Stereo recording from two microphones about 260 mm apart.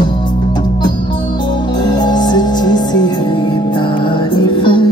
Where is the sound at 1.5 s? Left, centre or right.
Centre.